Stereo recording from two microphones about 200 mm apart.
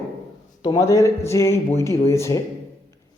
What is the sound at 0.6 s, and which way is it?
A man's voice, 20° left (ahead or behind).